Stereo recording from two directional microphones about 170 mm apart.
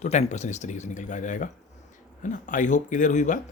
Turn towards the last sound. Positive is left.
turn(degrees=45)  # may be behind; listen again after turning